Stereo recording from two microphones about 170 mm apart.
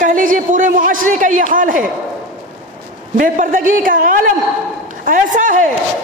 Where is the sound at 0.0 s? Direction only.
50° right (ahead or behind).